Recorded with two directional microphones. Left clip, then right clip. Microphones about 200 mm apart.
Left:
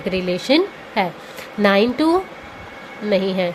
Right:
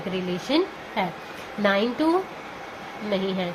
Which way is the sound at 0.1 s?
45° left (ahead or behind).